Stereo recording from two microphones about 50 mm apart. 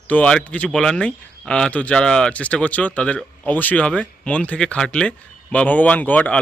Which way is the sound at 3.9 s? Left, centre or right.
Left.